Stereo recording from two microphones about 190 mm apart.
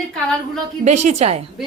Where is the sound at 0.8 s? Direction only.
35° right (ahead or behind).